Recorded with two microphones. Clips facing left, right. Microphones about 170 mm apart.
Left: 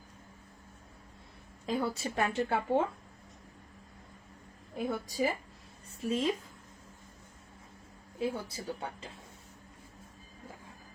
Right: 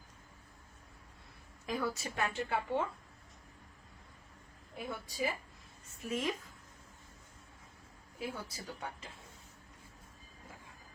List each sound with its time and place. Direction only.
1.6 s a woman's voice: 30° left (ahead or behind)
4.9 s a woman's voice: 40° left (ahead or behind)
6.1 s speech: 30° left (ahead or behind)
8.2 s speech: 30° left (ahead or behind)